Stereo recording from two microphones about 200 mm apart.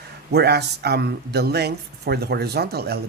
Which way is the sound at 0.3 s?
55° right (ahead or behind).